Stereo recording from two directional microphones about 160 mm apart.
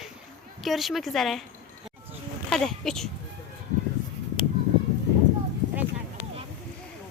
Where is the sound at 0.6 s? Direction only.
Centre (ahead or behind).